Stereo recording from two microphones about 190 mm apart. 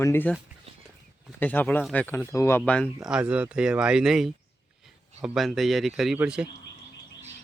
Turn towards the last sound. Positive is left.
turn(degrees=-5)  # may be behind; listen again after turning